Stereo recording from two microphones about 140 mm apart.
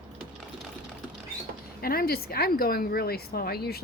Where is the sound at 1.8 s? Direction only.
90° left.